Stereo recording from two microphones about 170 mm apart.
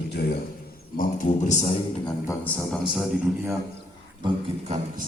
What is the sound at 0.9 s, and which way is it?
Speech, 45° left (ahead or behind).